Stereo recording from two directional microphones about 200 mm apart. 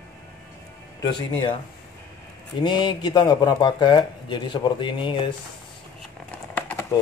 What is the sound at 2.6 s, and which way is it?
Speech, 20° left (ahead or behind).